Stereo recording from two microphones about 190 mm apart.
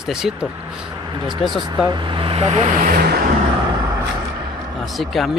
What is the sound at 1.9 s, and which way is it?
Speech, 25° right (ahead or behind).